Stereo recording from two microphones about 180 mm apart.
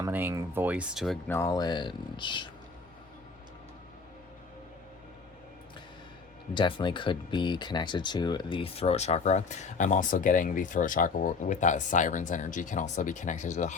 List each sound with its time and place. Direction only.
0.0 s speech: 10° right (ahead or behind)
1.3 s speech: 15° left (ahead or behind)
6.5 s speech: 25° left (ahead or behind)